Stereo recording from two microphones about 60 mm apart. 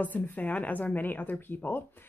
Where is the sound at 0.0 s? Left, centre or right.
Left.